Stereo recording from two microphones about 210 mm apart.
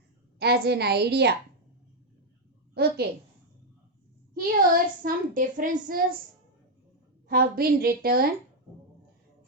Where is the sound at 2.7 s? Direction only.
50° right (ahead or behind).